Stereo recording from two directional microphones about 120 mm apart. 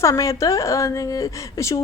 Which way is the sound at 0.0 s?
25° left (ahead or behind).